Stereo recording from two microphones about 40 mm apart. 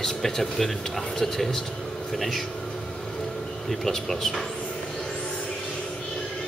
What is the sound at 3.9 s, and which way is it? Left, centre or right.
Speech, centre.